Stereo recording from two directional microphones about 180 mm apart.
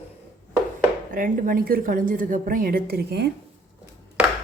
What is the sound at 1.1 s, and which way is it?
A woman's voice, 50° right (ahead or behind).